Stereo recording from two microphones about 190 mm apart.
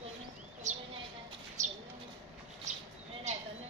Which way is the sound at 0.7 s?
40° right (ahead or behind).